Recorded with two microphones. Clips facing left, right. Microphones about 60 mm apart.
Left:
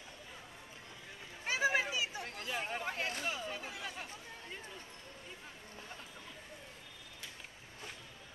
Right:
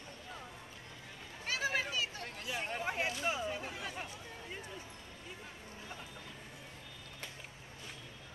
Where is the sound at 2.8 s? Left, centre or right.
Centre.